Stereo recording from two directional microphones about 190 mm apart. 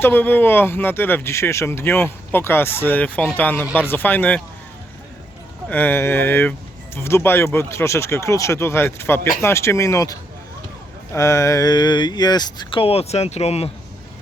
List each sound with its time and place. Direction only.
0.0 s speech: 10° left (ahead or behind)
5.6 s speech: 10° left (ahead or behind); by 13.7 s 35° left (ahead or behind)